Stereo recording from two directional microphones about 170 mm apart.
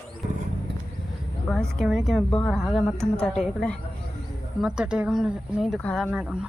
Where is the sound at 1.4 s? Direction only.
Centre (ahead or behind).